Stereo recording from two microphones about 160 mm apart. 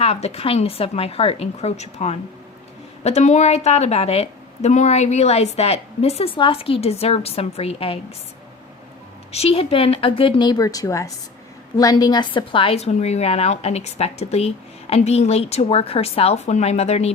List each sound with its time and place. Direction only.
0.0 s a woman's voice: 40° left (ahead or behind)
9.3 s a woman's voice: 40° left (ahead or behind)